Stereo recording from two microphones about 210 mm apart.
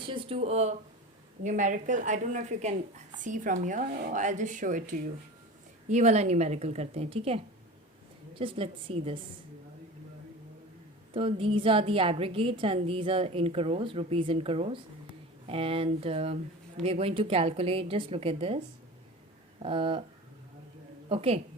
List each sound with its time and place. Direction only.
0.1 s a woman's voice: 25° right (ahead or behind)
11.1 s a woman's voice: 25° right (ahead or behind)
19.6 s a woman's voice: 25° right (ahead or behind)
21.1 s a woman's voice: 30° right (ahead or behind)